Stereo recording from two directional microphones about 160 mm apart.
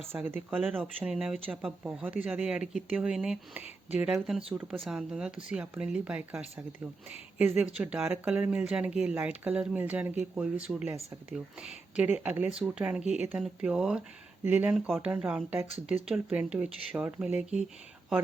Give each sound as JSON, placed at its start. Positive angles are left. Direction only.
{"t": 0.1, "sound": "speech", "side_deg": -10}
{"t": 11.9, "sound": "speech", "side_deg": -10}